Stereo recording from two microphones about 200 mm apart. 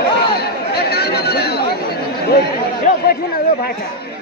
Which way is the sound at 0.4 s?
50° left (ahead or behind).